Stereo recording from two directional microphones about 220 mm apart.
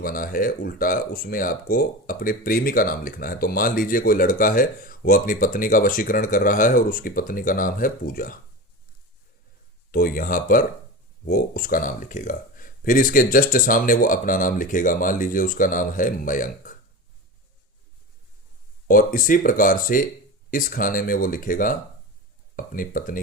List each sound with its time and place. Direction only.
0.0 s speech: 40° left (ahead or behind)
9.9 s speech: 40° left (ahead or behind)
18.9 s speech: 40° left (ahead or behind)